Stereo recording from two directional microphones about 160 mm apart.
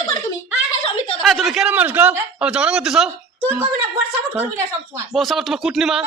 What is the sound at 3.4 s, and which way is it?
Speech, 15° right (ahead or behind).